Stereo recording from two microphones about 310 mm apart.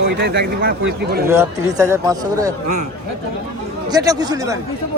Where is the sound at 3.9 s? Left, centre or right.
Centre.